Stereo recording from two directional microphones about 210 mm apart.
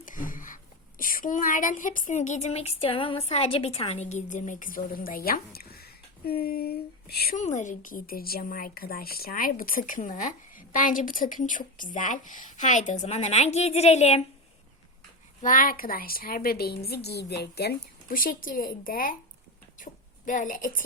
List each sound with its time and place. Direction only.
0.0 s a woman's voice: 40° left (ahead or behind)
15.4 s a woman's voice: 40° left (ahead or behind)